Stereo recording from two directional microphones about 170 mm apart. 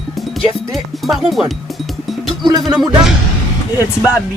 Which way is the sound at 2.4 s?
25° right (ahead or behind).